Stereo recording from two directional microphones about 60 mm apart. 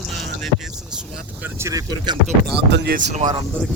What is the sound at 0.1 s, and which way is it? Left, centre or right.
Music, centre.